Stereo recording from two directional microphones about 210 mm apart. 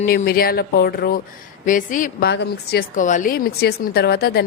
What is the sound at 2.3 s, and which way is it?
A woman's voice, 50° left (ahead or behind).